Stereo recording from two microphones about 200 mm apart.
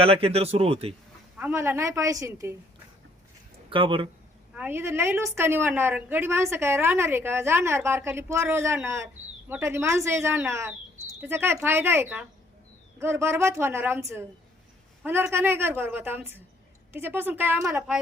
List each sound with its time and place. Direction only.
0.0 s speech: 30° right (ahead or behind)
1.4 s a woman's voice: 10° right (ahead or behind)
3.7 s speech: 25° right (ahead or behind)
4.5 s a woman's voice: 10° right (ahead or behind)